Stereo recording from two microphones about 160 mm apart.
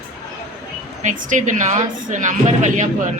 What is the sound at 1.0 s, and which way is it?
A woman's voice, 50° right (ahead or behind).